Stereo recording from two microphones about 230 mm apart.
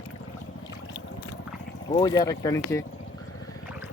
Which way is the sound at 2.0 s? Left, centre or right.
Centre.